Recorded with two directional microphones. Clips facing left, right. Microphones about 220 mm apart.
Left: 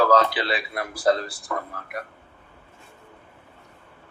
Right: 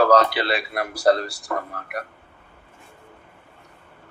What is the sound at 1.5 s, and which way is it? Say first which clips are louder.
Speech: right 2 dB; 50° right (ahead or behind).